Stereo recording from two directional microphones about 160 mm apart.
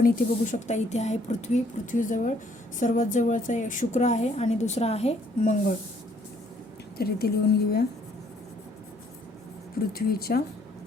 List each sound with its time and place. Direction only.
0.0 s a woman's voice: 50° left (ahead or behind)
7.0 s a woman's voice: 75° left (ahead or behind)
10.0 s a woman's voice: 70° left (ahead or behind)